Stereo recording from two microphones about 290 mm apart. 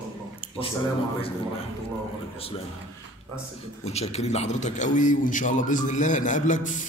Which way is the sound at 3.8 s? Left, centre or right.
Left.